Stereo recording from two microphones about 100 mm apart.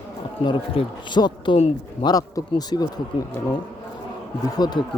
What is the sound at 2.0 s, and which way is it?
Speech, 40° left (ahead or behind).